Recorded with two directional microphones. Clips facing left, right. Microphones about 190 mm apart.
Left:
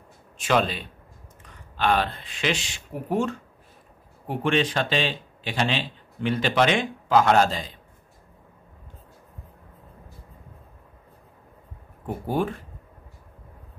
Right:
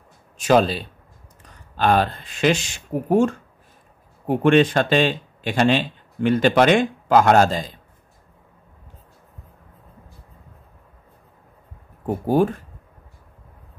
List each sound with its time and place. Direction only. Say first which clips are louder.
0.4 s speech: right 6 dB; 40° right (ahead or behind)
12.1 s speech: right 7 dB; 40° right (ahead or behind)